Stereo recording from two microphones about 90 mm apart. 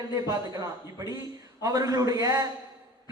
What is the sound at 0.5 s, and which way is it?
A man's voice, 35° right (ahead or behind).